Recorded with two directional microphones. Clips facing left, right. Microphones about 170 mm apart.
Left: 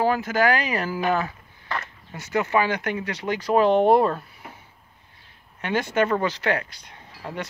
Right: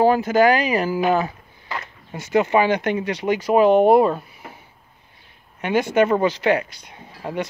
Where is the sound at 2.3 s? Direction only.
20° right (ahead or behind).